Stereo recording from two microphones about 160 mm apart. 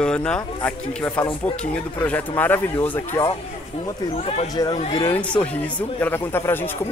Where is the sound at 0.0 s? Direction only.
5° left (ahead or behind).